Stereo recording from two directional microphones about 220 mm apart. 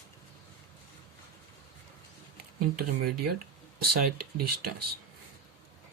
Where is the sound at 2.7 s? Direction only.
45° right (ahead or behind).